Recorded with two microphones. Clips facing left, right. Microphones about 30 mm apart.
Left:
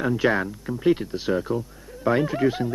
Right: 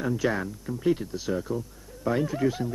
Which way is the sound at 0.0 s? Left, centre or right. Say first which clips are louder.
Left 5 dB; left.